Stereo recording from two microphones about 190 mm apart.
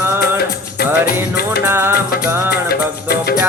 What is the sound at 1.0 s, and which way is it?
Music, 55° left (ahead or behind).